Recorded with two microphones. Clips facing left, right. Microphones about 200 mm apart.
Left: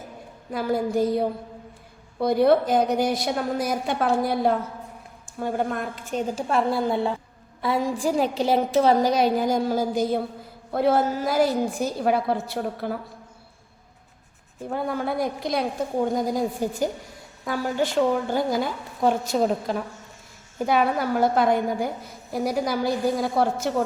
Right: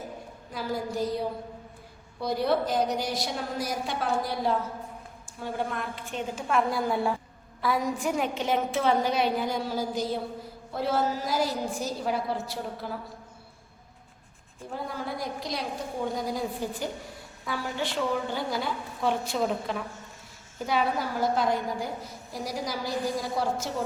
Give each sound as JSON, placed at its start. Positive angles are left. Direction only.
{"t": 0.5, "sound": "a woman's voice", "side_deg": 55}
{"t": 6.5, "sound": "a woman's voice", "side_deg": 30}
{"t": 14.7, "sound": "a woman's voice", "side_deg": 60}
{"t": 20.7, "sound": "a woman's voice", "side_deg": 55}